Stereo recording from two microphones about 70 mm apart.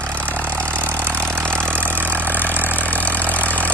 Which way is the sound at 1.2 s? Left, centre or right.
Centre.